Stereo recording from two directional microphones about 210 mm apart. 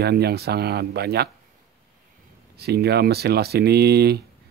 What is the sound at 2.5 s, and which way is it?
Speech, 50° right (ahead or behind).